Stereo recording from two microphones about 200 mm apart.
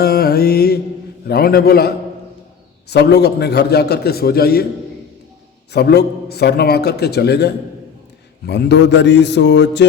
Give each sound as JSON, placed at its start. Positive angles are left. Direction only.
{"t": 0.0, "sound": "mantra", "side_deg": 50}
{"t": 1.3, "sound": "a man's voice", "side_deg": 50}
{"t": 2.9, "sound": "a man's voice", "side_deg": 55}
{"t": 5.7, "sound": "a man's voice", "side_deg": 55}